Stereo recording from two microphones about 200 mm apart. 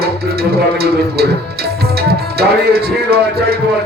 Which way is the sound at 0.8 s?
50° right (ahead or behind).